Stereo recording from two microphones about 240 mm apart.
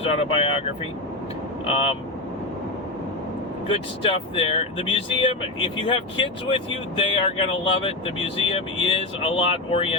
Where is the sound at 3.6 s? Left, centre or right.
Left.